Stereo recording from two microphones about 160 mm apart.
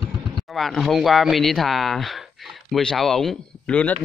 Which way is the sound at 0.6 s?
Centre (ahead or behind).